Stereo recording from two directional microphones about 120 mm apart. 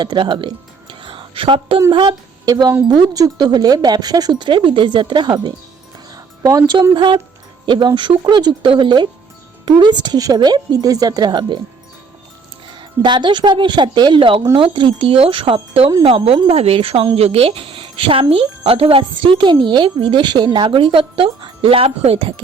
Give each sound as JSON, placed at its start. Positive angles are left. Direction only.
{"t": 0.0, "sound": "speech", "side_deg": -40}
{"t": 13.0, "sound": "speech", "side_deg": -40}